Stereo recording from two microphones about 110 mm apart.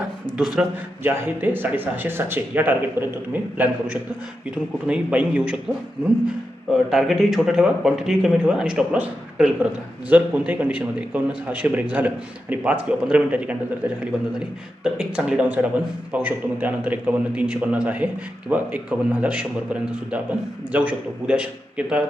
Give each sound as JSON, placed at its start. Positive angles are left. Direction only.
{"t": 0.3, "sound": "speech", "side_deg": -5}
{"t": 1.0, "sound": "a man's voice", "side_deg": -20}
{"t": 6.9, "sound": "a man's voice", "side_deg": 0}